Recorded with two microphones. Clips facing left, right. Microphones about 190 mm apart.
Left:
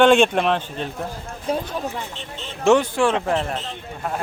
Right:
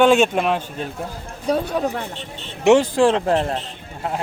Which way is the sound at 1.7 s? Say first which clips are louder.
Right 5 dB; 65° right (ahead or behind).